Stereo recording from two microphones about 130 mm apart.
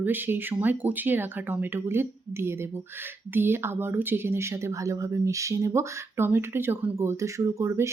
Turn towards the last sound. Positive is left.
turn(degrees=-20)  # may be behind; listen again after turning